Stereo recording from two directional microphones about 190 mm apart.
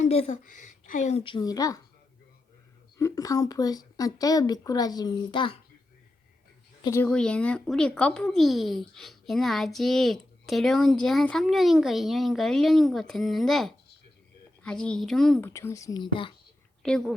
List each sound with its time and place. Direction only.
0.2 s speech: 40° left (ahead or behind); by 1.8 s 20° left (ahead or behind)
3.0 s speech: 20° left (ahead or behind)
6.8 s speech: 15° left (ahead or behind)
7.1 s speech: 5° left (ahead or behind)
15.4 s speech: 15° left (ahead or behind)
16.8 s speech: 5° left (ahead or behind)